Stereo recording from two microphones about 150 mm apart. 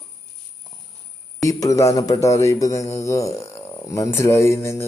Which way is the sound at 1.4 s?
20° left (ahead or behind).